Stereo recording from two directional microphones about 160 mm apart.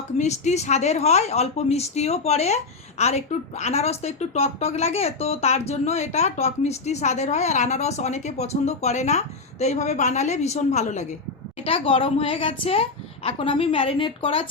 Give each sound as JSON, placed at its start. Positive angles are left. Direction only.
{"t": 0.2, "sound": "a woman's voice", "side_deg": 45}